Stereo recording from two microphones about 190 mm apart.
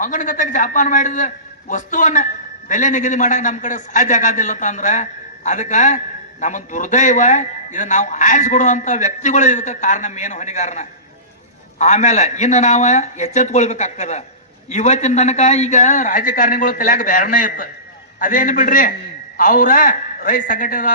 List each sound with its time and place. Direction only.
0.0 s a man's voice: 45° left (ahead or behind)